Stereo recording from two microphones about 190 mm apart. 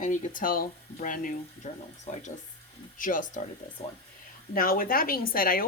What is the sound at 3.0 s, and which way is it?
Speech, 45° left (ahead or behind).